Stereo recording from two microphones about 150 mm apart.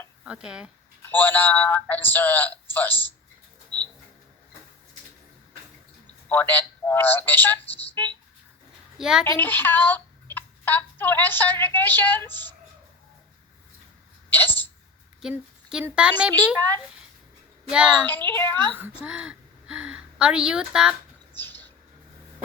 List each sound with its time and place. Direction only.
0.3 s speech: 5° right (ahead or behind)
1.0 s speech: 10° left (ahead or behind)
3.7 s bird: 30° right (ahead or behind)
6.2 s speech: 10° left (ahead or behind)
9.0 s a child's voice: 5° right (ahead or behind)
9.2 s speech: 15° left (ahead or behind)
14.3 s speech: 15° left (ahead or behind)
15.2 s speech: 5° right (ahead or behind)
16.6 s speech: 15° left (ahead or behind)
17.7 s a woman's voice: 5° right (ahead or behind)
18.0 s speech: 10° left (ahead or behind)
19.0 s a woman's voice: 5° right (ahead or behind)
21.3 s a sound: 15° left (ahead or behind)